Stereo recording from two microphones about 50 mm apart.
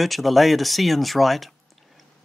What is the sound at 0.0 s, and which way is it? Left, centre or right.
Speech, centre.